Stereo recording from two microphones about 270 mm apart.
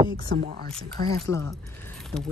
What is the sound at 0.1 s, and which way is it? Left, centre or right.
Speech, right.